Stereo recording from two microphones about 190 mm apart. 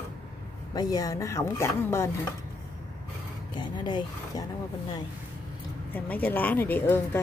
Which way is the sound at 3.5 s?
25° left (ahead or behind).